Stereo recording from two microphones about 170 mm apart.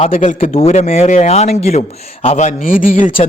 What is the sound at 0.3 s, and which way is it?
A man's voice, 40° left (ahead or behind).